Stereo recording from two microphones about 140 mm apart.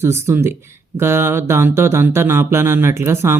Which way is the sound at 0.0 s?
15° right (ahead or behind).